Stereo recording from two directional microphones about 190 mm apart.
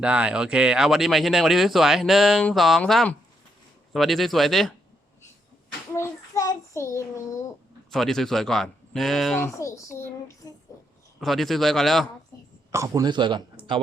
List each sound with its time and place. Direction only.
0.0 s speech: 5° right (ahead or behind)
5.9 s child singing: 15° left (ahead or behind)
7.9 s speech: centre (ahead or behind)
9.6 s child singing: 15° left (ahead or behind)
11.2 s speech: centre (ahead or behind)
12.7 s speech: 20° right (ahead or behind)